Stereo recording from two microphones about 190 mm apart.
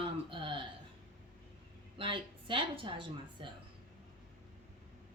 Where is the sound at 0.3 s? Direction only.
25° right (ahead or behind).